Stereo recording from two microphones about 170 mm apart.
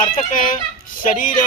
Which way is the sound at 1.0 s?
50° left (ahead or behind).